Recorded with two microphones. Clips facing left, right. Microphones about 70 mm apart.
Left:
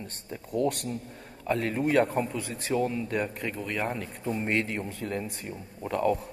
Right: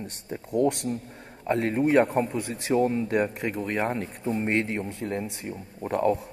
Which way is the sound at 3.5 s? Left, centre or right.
Right.